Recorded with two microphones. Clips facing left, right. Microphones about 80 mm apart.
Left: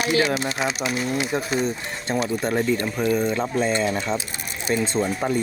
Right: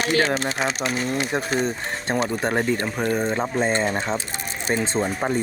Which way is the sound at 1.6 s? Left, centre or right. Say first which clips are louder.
Right 1 dB; right.